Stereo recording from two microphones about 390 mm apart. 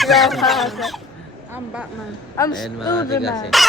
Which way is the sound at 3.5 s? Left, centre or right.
Centre.